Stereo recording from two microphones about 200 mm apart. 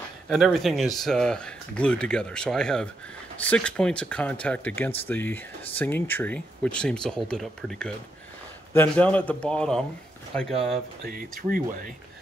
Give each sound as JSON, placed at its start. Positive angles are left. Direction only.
{"t": 0.3, "sound": "a man's voice", "side_deg": 0}
{"t": 11.1, "sound": "speech", "side_deg": -45}